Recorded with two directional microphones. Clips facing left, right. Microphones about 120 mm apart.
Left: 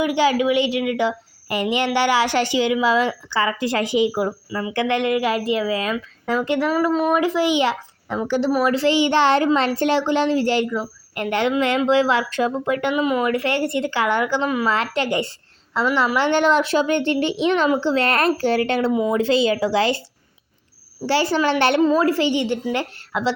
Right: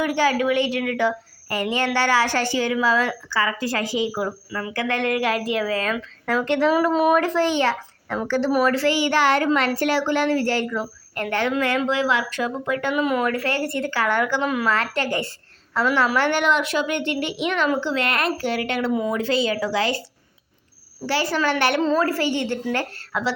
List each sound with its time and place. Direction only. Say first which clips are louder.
0.0 s a woman's voice: left 2 dB; 15° left (ahead or behind)
5.0 s speech: left 2 dB; centre (ahead or behind)
6.9 s speech: right 1 dB; 5° right (ahead or behind)
7.2 s a child's voice: left 2 dB; 10° left (ahead or behind)
12.9 s speech: even; 5° left (ahead or behind)
13.3 s a woman's voice: left 3 dB; 20° left (ahead or behind)
14.4 s speech: left 2 dB; centre (ahead or behind)
14.7 s a woman's voice: left 2 dB; 20° left (ahead or behind)
16.4 s a woman's voice: left 4 dB; 30° left (ahead or behind)
21.1 s a woman's voice: left 3 dB; 30° left (ahead or behind)
21.8 s speech: left 3 dB; 15° left (ahead or behind)